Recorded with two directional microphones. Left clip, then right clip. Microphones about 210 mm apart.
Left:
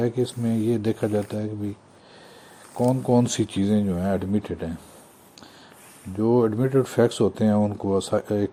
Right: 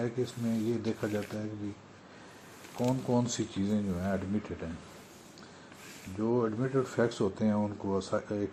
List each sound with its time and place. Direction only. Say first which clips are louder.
0.0 s speech: left 9 dB; 55° left (ahead or behind)
2.7 s speech: left 10 dB; 50° left (ahead or behind)
6.1 s speech: left 10 dB; 50° left (ahead or behind)